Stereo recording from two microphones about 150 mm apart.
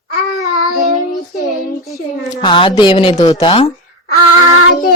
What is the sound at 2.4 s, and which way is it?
Speech, 35° left (ahead or behind).